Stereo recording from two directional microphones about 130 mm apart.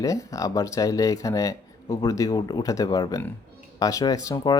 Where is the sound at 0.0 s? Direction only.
25° left (ahead or behind).